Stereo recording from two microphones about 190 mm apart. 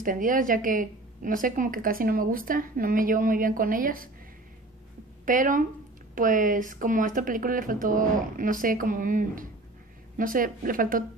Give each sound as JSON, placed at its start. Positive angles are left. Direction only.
{"t": 0.0, "sound": "a woman's voice", "side_deg": -45}
{"t": 5.2, "sound": "a woman's voice", "side_deg": -45}